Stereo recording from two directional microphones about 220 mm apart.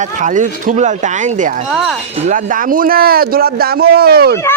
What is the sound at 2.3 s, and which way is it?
Speech, 35° right (ahead or behind).